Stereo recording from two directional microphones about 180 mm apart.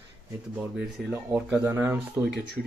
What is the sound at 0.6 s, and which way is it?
Speech, centre (ahead or behind).